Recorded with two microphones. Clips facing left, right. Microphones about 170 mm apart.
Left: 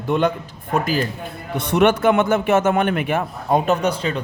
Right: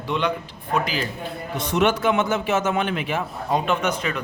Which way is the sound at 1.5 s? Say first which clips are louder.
Left 5 dB; 60° left (ahead or behind).